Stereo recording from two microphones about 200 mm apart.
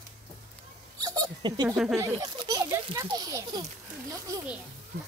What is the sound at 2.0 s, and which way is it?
A child's voice, 15° right (ahead or behind).